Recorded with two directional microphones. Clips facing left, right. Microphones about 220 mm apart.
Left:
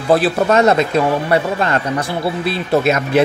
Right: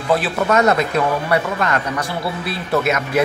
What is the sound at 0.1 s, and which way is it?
Speech, 30° left (ahead or behind).